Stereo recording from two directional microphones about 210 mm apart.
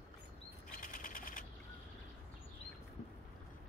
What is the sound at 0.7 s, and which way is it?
Bird flight, 40° left (ahead or behind).